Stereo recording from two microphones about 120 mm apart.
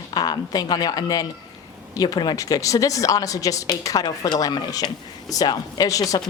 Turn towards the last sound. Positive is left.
turn(degrees=30)  # may be behind; listen again after turning